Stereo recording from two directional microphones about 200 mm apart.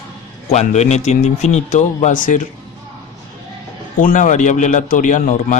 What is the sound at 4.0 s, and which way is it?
Speech, 40° left (ahead or behind).